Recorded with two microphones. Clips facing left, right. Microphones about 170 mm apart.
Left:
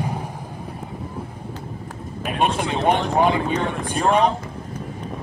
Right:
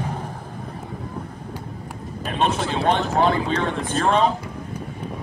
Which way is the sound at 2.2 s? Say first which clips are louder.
Left 1 dB; 10° left (ahead or behind).